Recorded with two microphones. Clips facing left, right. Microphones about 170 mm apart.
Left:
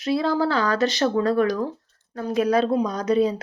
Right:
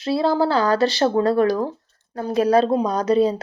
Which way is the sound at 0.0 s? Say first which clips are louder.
Right 2 dB; 30° right (ahead or behind).